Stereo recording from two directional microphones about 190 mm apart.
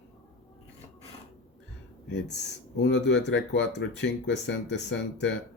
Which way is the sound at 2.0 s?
65° left (ahead or behind).